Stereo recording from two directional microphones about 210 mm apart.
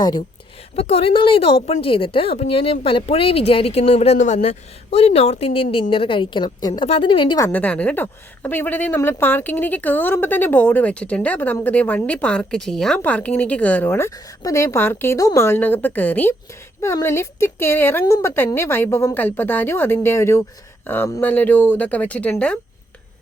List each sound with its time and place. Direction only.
0.0 s a woman's voice: 20° left (ahead or behind)